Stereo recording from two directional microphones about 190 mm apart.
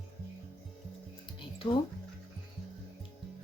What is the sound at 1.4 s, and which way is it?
Music, 25° left (ahead or behind).